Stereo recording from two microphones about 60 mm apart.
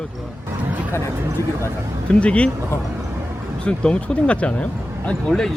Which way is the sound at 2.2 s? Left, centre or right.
Left.